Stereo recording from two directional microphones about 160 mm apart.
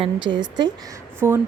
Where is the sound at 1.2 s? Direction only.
15° right (ahead or behind).